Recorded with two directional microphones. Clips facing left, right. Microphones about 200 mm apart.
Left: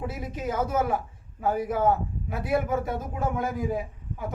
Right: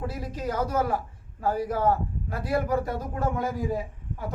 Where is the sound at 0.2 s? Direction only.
5° left (ahead or behind).